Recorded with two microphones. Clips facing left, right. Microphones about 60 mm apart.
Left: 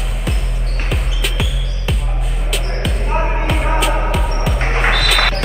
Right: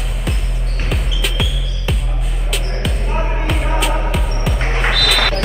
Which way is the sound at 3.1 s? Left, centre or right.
Left.